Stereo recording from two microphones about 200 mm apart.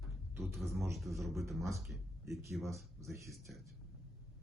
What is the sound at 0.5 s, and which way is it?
A man's voice, centre (ahead or behind).